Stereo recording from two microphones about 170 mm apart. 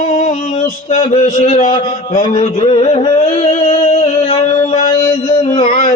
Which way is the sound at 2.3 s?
35° left (ahead or behind).